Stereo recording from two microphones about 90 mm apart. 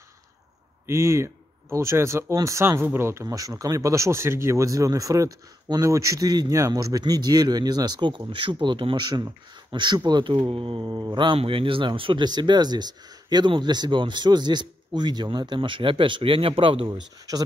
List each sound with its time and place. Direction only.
0.8 s speech: 30° right (ahead or behind); by 10.4 s 60° right (ahead or behind)
10.5 s speech: 75° right (ahead or behind)
10.9 s speech: 55° right (ahead or behind); by 12.3 s 75° right (ahead or behind)
12.3 s speech: 50° right (ahead or behind); by 17.0 s 75° right (ahead or behind)